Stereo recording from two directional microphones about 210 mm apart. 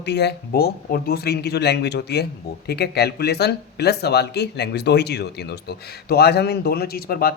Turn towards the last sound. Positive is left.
turn(degrees=45)  # may be behind; listen again after turning